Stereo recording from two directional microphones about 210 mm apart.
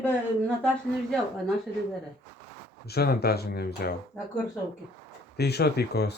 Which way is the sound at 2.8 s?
50° left (ahead or behind).